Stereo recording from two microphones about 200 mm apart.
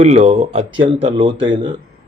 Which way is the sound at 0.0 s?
30° right (ahead or behind).